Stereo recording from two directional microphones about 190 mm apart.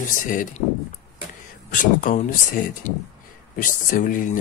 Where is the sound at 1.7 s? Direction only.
45° left (ahead or behind).